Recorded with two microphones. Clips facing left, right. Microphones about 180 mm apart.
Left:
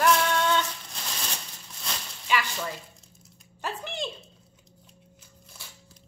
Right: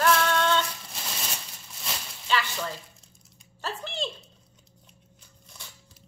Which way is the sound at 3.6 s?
15° left (ahead or behind).